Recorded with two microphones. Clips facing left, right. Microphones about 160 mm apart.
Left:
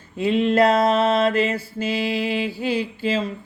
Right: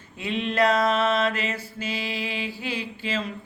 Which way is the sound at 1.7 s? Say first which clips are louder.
Left 8 dB; 45° left (ahead or behind).